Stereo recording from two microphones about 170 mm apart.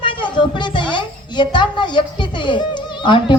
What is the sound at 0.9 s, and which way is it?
A child's voice, 25° left (ahead or behind).